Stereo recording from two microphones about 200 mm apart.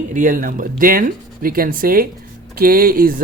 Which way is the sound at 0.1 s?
40° right (ahead or behind).